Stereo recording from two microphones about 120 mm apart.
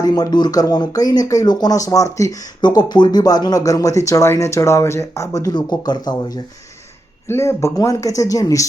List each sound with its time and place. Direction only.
0.0 s speech: 35° left (ahead or behind)
7.3 s speech: 25° left (ahead or behind)